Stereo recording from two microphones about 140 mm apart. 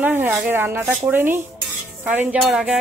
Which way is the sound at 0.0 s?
15° right (ahead or behind).